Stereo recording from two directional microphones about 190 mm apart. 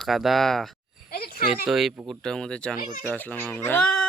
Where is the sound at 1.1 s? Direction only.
55° left (ahead or behind).